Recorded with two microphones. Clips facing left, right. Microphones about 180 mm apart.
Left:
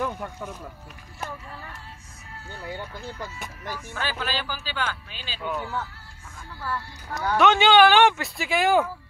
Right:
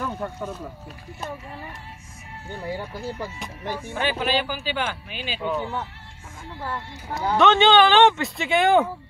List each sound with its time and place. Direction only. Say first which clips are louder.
1.2 s speech: right 2 dB; 20° right (ahead or behind)
7.3 s speech: right 1 dB; 5° left (ahead or behind)